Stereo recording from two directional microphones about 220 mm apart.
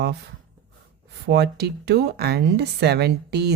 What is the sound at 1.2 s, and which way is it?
Speech, 45° right (ahead or behind).